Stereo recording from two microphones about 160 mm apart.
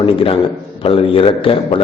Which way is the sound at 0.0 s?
35° left (ahead or behind).